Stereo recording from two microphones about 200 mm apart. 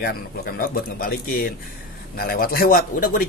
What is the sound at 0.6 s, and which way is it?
Speech, 45° left (ahead or behind).